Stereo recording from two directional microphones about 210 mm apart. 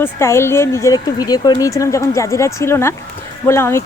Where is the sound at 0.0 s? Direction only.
10° left (ahead or behind).